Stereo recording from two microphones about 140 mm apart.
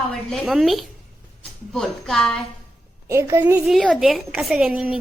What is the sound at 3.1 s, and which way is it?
Speech, 20° right (ahead or behind).